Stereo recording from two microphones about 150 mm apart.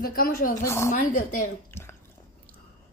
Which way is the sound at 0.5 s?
20° left (ahead or behind).